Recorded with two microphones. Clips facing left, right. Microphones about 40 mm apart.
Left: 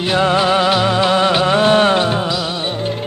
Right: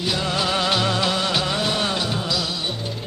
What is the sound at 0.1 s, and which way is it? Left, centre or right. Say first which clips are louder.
Music: left 11 dB; left.